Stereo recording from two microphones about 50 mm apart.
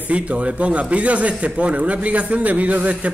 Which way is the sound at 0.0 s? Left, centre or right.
Right.